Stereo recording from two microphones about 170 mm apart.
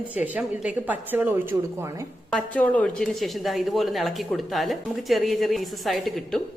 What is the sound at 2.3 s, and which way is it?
A woman's voice, 10° left (ahead or behind).